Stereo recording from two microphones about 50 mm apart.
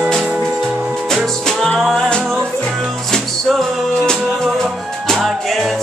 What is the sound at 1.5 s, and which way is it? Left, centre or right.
Music, centre.